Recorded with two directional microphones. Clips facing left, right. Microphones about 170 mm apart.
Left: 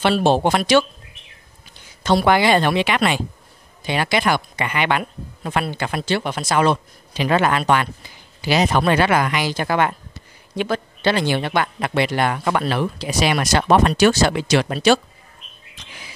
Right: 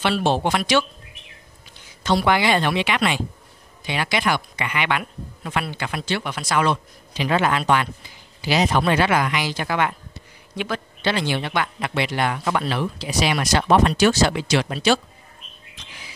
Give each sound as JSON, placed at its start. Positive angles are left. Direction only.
{"t": 0.0, "sound": "speech", "side_deg": 35}
{"t": 2.0, "sound": "speech", "side_deg": 45}
{"t": 7.2, "sound": "speech", "side_deg": 50}